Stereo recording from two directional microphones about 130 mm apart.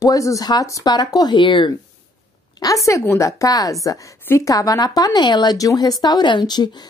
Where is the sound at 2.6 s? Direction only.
25° left (ahead or behind).